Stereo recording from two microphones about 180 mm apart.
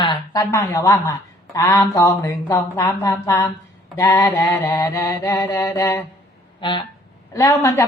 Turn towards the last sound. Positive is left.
turn(degrees=15)  # may be behind; listen again after turning